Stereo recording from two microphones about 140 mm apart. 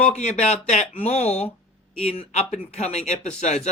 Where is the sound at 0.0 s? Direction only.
55° left (ahead or behind).